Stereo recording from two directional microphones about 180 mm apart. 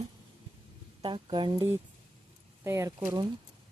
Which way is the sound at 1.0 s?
25° right (ahead or behind).